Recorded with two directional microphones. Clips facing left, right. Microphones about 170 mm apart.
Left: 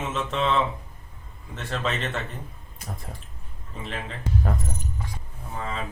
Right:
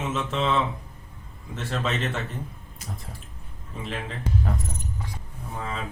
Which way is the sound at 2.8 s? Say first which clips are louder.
Left 1 dB; 55° left (ahead or behind).